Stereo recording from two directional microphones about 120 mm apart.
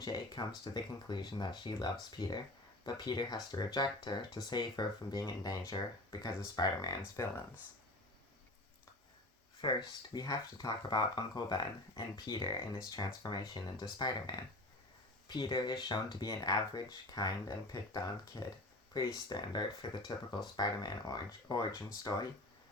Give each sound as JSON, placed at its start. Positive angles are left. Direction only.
{"t": 0.0, "sound": "speech", "side_deg": 30}
{"t": 9.6, "sound": "speech", "side_deg": 40}